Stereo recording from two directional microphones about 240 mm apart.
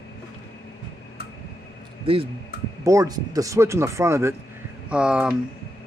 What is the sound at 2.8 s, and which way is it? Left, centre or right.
Speech, centre.